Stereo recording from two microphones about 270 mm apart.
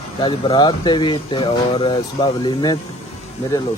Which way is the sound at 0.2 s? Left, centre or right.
Centre.